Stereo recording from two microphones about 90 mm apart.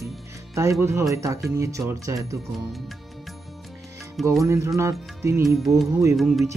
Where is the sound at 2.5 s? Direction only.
Centre (ahead or behind).